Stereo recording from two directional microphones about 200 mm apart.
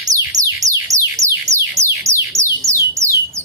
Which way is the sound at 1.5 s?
15° right (ahead or behind).